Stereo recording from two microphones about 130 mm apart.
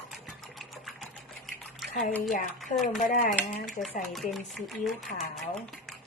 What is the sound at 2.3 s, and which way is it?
Speech, 90° left.